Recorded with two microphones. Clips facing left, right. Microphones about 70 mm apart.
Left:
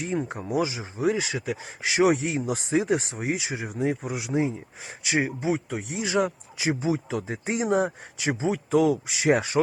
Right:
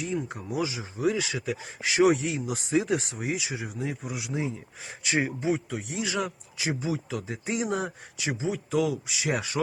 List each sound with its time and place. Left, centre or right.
0.0 s speech: left
5.0 s speech: centre
5.6 s speech: left
6.0 s speech: left
8.2 s speech: left